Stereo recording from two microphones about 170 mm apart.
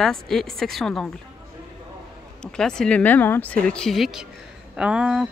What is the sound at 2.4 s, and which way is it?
Speech, 5° left (ahead or behind).